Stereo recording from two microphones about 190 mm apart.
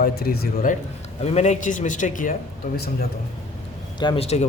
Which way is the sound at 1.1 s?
35° left (ahead or behind).